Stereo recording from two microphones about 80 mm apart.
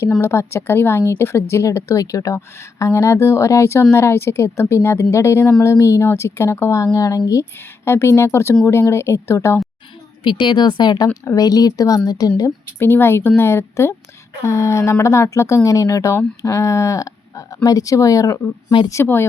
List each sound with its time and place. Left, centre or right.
0.3 s a woman's voice: left
7.6 s a woman's voice: left
10.2 s speech: left
12.8 s a woman's voice: left
19.0 s speech: left